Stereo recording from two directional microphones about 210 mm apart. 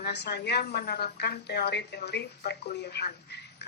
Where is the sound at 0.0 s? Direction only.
50° left (ahead or behind).